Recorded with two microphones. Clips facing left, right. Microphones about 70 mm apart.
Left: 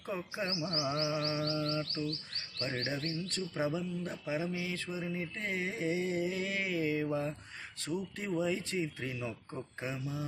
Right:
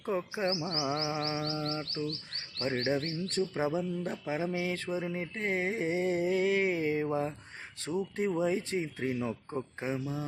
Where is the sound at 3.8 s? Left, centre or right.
Right.